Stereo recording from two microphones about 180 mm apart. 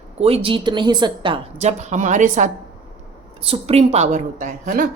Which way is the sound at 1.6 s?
40° right (ahead or behind).